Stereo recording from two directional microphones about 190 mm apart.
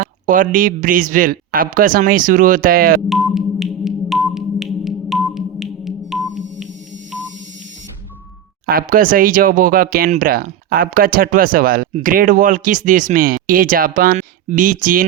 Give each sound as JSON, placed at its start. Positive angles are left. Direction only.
{"t": 0.0, "sound": "speech", "side_deg": -45}
{"t": 3.1, "sound": "music", "side_deg": 0}
{"t": 8.6, "sound": "speech", "side_deg": -50}